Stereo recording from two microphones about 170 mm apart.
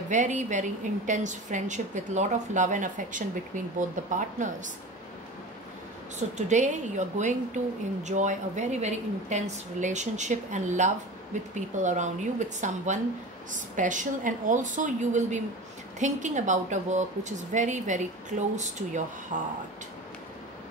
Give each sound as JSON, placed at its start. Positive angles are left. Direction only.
{"t": 0.1, "sound": "a woman's voice", "side_deg": -45}
{"t": 6.1, "sound": "a woman's voice", "side_deg": -45}